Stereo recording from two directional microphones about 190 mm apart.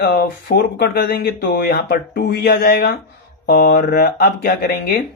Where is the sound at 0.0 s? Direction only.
60° left (ahead or behind).